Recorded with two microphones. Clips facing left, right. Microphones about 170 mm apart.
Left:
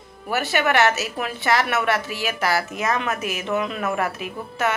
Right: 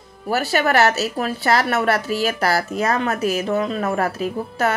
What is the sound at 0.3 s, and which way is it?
A woman's voice, 35° right (ahead or behind).